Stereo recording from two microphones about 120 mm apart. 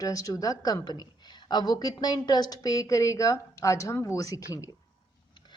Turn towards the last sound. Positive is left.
turn(degrees=25)  # may be behind; listen again after turning